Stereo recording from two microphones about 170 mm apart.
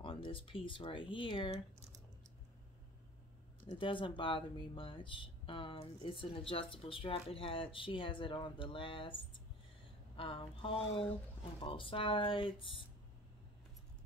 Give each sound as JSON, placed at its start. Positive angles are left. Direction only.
{"t": 0.0, "sound": "speech", "side_deg": 30}
{"t": 3.6, "sound": "speech", "side_deg": 30}